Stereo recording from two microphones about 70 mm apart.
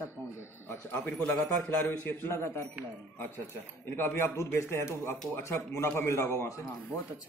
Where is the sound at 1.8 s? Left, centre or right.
Left.